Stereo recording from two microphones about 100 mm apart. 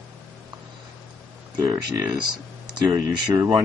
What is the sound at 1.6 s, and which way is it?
Speech, 40° right (ahead or behind).